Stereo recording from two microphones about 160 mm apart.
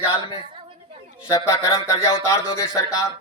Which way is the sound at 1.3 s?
20° left (ahead or behind).